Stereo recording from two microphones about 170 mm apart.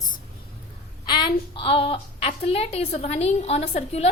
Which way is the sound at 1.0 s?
30° left (ahead or behind).